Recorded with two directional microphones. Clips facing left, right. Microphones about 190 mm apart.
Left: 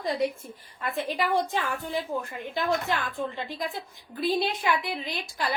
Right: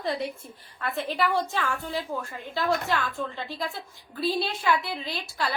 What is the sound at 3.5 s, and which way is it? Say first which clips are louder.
A woman's voice: even; 15° left (ahead or behind).